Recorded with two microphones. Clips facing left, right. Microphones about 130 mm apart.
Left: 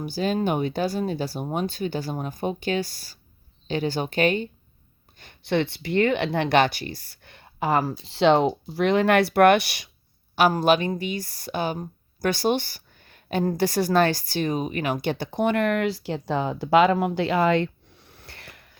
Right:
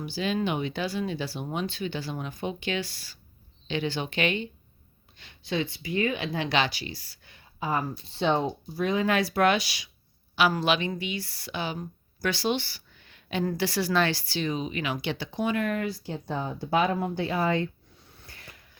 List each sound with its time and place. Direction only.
0.0 s speech: 45° left (ahead or behind)
10.3 s a woman's voice: 45° left (ahead or behind); by 18.7 s 65° left (ahead or behind)